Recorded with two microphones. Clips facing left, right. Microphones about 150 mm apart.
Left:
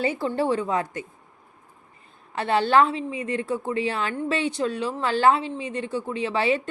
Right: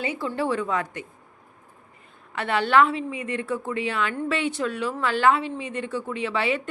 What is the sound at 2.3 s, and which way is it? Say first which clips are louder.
A woman's voice: left 1 dB; 30° left (ahead or behind).